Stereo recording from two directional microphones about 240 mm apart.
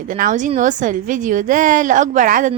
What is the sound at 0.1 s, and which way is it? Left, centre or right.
A woman's voice, right.